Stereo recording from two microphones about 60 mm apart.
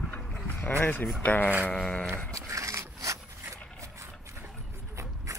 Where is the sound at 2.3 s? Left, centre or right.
Right.